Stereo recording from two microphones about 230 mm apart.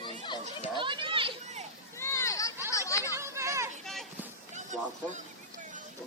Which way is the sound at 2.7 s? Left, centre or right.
Centre.